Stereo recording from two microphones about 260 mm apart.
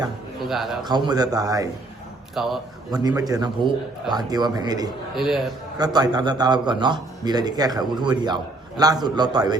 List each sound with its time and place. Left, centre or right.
0.3 s a man's voice: centre
0.9 s a man's voice: centre
2.3 s a man's voice: centre
2.9 s a man's voice: centre
5.1 s a man's voice: centre
5.7 s a man's voice: centre